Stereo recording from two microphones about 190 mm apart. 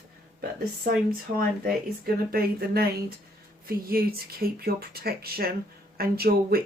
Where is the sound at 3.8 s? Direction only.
50° right (ahead or behind).